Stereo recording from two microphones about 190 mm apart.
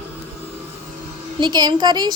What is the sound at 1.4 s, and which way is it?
Speech, 20° right (ahead or behind).